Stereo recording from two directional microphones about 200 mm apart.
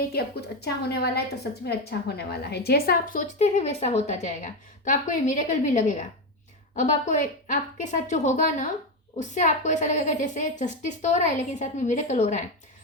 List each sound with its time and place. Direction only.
0.1 s a woman's voice: 55° left (ahead or behind); by 12.5 s 35° left (ahead or behind)